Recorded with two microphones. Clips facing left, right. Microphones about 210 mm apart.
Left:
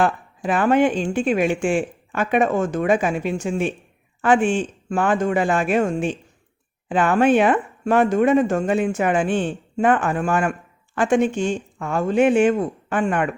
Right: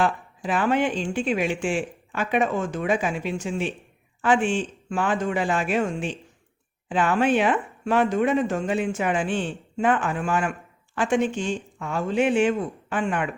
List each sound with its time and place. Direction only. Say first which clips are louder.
0.0 s speech: left 4 dB; 50° left (ahead or behind)